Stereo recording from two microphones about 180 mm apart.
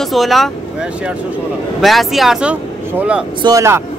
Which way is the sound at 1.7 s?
Centre (ahead or behind).